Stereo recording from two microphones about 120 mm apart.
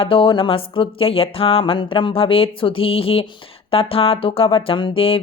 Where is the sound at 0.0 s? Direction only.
50° left (ahead or behind).